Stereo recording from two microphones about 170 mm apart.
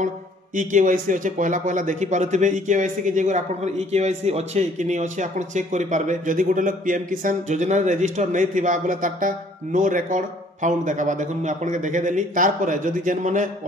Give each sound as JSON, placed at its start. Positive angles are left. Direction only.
{"t": 0.6, "sound": "speech", "side_deg": -50}